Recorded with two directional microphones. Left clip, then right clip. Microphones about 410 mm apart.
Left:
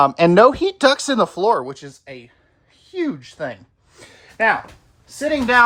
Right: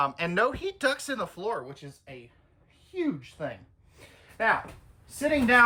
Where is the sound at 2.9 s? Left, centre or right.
Left.